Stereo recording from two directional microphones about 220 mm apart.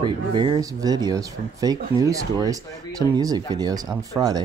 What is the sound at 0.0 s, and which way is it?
Speech, 20° right (ahead or behind).